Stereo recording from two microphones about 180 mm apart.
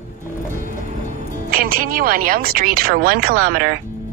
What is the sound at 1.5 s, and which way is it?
Speech, 55° right (ahead or behind).